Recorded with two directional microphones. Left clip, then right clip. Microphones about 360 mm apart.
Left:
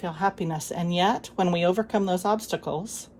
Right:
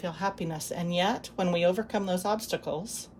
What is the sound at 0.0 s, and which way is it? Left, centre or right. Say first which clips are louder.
Speech: left 5 dB; centre.